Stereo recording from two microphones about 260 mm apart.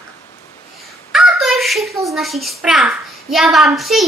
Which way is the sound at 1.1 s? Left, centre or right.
Centre.